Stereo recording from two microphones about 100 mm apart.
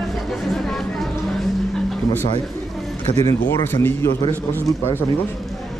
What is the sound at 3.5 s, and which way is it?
Speech, 20° left (ahead or behind).